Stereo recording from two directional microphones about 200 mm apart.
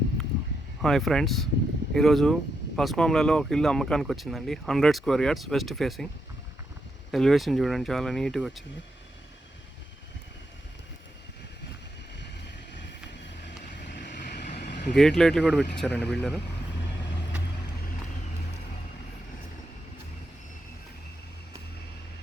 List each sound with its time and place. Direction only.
0.8 s speech: centre (ahead or behind)
7.1 s speech: centre (ahead or behind)
13.8 s vehicle: 55° left (ahead or behind)
14.4 s vehicle: 35° left (ahead or behind)
14.9 s speech: centre (ahead or behind)